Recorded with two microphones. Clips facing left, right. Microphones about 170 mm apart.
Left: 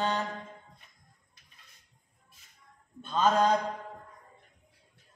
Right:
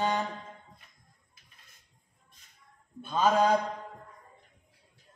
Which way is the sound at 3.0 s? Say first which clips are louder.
Right 1 dB; 10° right (ahead or behind).